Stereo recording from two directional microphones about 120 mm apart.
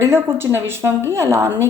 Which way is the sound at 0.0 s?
20° right (ahead or behind).